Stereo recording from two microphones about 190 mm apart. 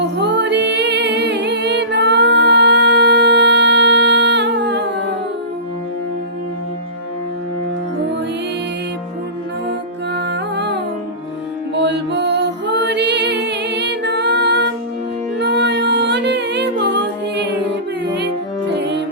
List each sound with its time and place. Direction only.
0.0 s music: 65° right (ahead or behind)
10.2 s music: 65° right (ahead or behind)
18.7 s music: 65° right (ahead or behind)